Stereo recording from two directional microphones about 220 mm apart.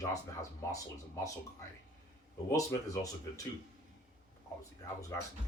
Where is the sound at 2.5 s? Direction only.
15° left (ahead or behind).